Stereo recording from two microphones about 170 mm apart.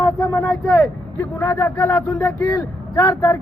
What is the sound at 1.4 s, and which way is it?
A man's voice, 10° left (ahead or behind).